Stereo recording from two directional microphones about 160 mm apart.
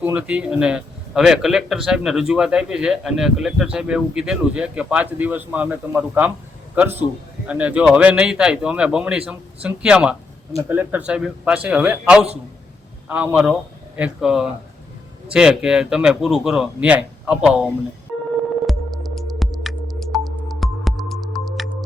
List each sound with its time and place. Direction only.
0.0 s a man's voice: 10° right (ahead or behind)
7.4 s a man's voice: 10° right (ahead or behind)
18.6 s music: centre (ahead or behind)